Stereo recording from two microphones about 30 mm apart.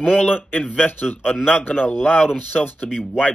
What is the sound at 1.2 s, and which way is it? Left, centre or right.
Speech, right.